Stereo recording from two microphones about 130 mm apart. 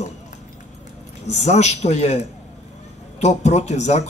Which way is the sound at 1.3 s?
60° left (ahead or behind).